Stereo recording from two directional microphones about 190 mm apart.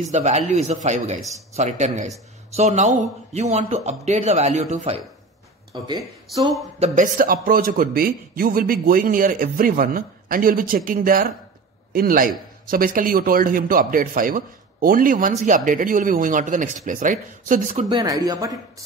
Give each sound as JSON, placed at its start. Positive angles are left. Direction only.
{"t": 0.0, "sound": "a man's voice", "side_deg": -40}
{"t": 5.7, "sound": "speech", "side_deg": -25}
{"t": 6.8, "sound": "a man's voice", "side_deg": -45}
{"t": 17.8, "sound": "speech", "side_deg": -20}